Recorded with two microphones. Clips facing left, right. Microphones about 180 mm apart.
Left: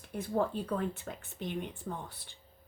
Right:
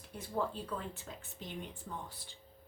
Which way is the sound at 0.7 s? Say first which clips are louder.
Left 7 dB; 60° left (ahead or behind).